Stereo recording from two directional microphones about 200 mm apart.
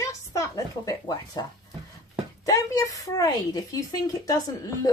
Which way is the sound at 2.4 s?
15° left (ahead or behind).